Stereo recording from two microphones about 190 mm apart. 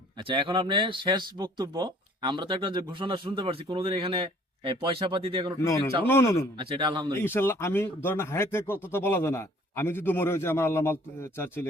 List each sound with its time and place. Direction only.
0.3 s speech: 25° right (ahead or behind)
6.1 s speech: 15° left (ahead or behind)
6.6 s speech: 25° right (ahead or behind)
7.2 s speech: 10° left (ahead or behind)